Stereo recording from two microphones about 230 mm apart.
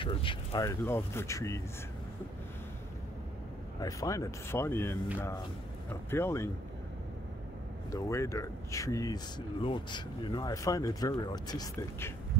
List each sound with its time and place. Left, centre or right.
0.0 s speech: left
3.8 s speech: centre
6.0 s speech: centre
7.9 s speech: centre